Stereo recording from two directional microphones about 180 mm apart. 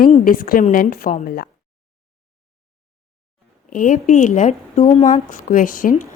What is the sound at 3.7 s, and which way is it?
Speech, 45° left (ahead or behind).